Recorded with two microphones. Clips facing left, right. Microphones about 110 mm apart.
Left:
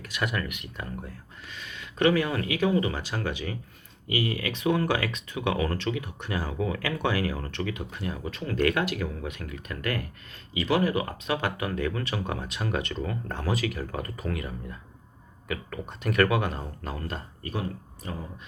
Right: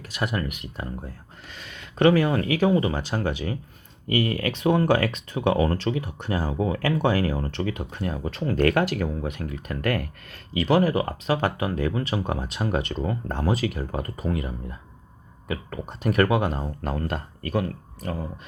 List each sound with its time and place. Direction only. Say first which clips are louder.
0.0 s speech: right 3 dB; 30° right (ahead or behind)
1.5 s speech: right 4 dB; 45° right (ahead or behind)
6.5 s speech: right 6 dB; 30° right (ahead or behind); by 9.0 s 50° right (ahead or behind)
9.0 s speech: right 5 dB; 35° right (ahead or behind)
16.8 s speech: right 8 dB; 50° right (ahead or behind)